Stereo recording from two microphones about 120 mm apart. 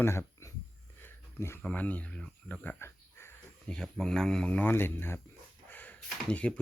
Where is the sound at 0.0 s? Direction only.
20° left (ahead or behind).